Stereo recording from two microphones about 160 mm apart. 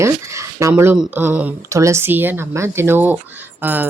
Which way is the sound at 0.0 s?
20° right (ahead or behind).